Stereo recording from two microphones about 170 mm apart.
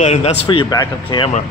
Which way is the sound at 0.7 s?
25° left (ahead or behind).